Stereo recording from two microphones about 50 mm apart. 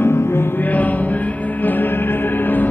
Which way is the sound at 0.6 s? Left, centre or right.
Left.